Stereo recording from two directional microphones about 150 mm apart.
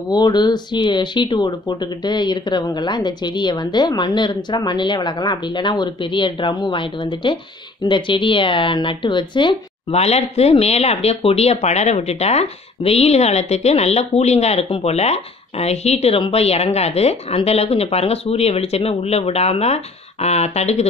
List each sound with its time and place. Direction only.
0.1 s a woman's voice: 30° left (ahead or behind); by 20.9 s 45° left (ahead or behind)